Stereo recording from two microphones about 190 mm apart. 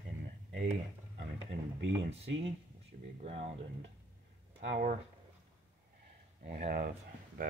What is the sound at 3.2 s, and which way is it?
Speech, 30° right (ahead or behind).